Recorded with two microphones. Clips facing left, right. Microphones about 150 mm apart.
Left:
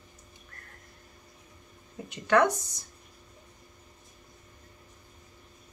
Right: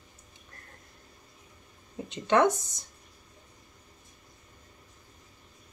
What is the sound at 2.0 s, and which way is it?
Speech, 25° right (ahead or behind).